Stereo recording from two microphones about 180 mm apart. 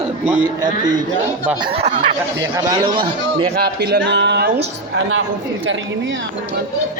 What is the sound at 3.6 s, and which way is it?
Speech, 60° right (ahead or behind).